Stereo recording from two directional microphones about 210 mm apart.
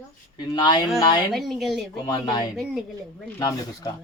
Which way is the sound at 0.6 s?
20° left (ahead or behind).